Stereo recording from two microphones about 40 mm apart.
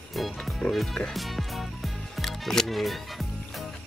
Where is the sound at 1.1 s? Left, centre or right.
Centre.